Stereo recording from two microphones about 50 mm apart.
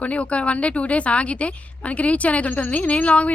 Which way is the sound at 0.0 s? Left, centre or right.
Left.